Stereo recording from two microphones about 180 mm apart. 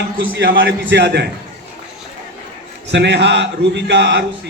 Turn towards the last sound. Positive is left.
turn(degrees=-75)  # may be behind; listen again after turning